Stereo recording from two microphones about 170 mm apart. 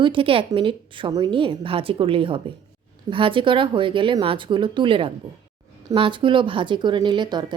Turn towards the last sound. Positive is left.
turn(degrees=-25)  # may be behind; listen again after turning